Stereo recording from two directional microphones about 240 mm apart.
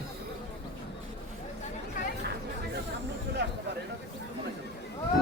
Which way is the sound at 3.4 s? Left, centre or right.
Right.